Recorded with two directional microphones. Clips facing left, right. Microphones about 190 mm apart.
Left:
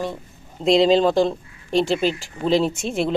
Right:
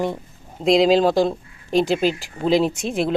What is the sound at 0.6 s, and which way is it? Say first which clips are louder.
Speech: even; centre (ahead or behind).